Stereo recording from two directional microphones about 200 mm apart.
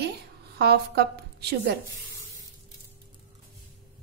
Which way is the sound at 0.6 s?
55° right (ahead or behind).